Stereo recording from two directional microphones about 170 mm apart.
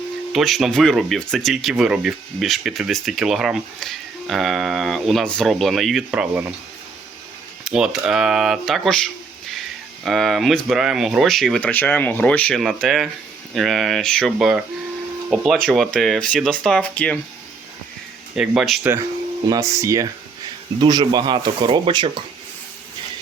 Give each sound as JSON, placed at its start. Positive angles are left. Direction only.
{"t": 0.3, "sound": "speech", "side_deg": 0}
{"t": 7.6, "sound": "speech", "side_deg": -5}
{"t": 10.0, "sound": "speech", "side_deg": 0}
{"t": 18.3, "sound": "speech", "side_deg": 0}
{"t": 18.8, "sound": "speech", "side_deg": -15}